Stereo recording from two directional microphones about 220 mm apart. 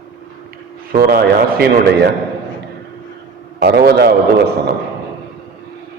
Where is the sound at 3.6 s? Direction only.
45° right (ahead or behind).